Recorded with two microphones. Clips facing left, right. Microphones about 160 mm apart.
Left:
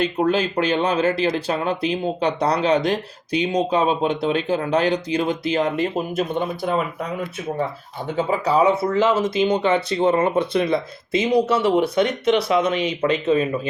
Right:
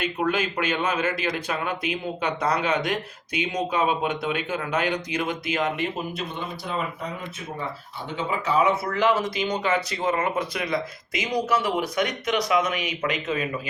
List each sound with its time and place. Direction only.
0.0 s speech: 30° left (ahead or behind)
8.1 s speech: 40° left (ahead or behind)
8.8 s speech: 25° left (ahead or behind)